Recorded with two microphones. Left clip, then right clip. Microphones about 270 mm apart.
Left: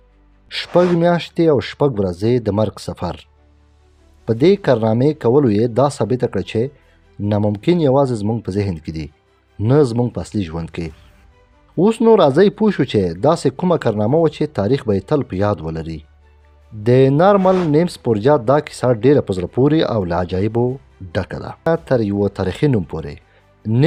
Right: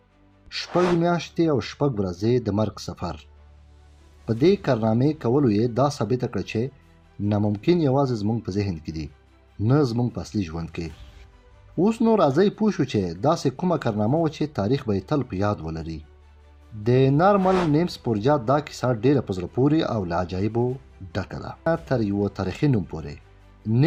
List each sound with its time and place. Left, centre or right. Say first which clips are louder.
0.4 s speech: left 7 dB; left
4.3 s speech: left 7 dB; left